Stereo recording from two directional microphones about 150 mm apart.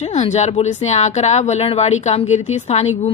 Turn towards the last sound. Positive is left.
turn(degrees=45)  # may be behind; listen again after turning